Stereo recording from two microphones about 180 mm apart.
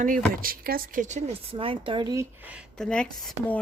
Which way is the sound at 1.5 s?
30° right (ahead or behind).